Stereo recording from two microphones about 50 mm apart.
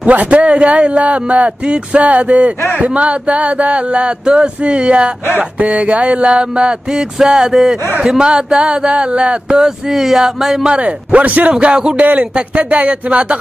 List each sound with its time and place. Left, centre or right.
0.0 s speech: right
9.6 s speech: centre
10.7 s speech: right
11.5 s speech: centre
12.2 s speech: right